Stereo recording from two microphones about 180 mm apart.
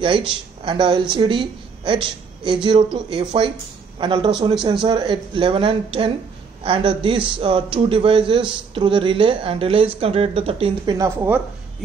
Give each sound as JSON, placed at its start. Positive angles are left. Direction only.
{"t": 0.3, "sound": "speech", "side_deg": -25}
{"t": 11.0, "sound": "speech", "side_deg": -15}